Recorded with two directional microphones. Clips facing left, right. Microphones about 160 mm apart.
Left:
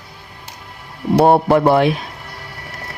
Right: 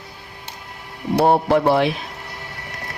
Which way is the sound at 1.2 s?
55° left (ahead or behind).